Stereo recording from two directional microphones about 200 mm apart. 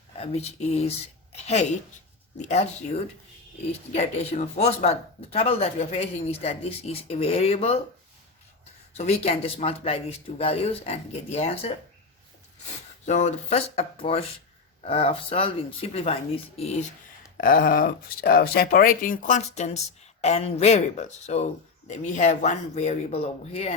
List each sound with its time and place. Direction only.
0.2 s speech: 30° left (ahead or behind)
2.4 s speech: 35° left (ahead or behind)
3.7 s speech: 30° left (ahead or behind)
9.0 s speech: 30° left (ahead or behind)
13.1 s speech: 35° left (ahead or behind)
17.3 s speech: 45° left (ahead or behind)